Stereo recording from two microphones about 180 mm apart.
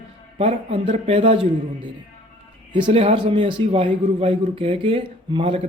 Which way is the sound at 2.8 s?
35° right (ahead or behind).